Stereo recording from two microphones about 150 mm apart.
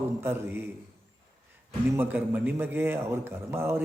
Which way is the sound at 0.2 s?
15° right (ahead or behind).